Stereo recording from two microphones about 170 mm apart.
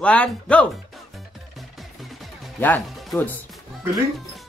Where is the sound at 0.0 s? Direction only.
5° left (ahead or behind).